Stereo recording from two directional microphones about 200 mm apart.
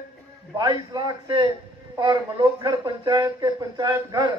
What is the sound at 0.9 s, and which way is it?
A man's voice, 20° right (ahead or behind).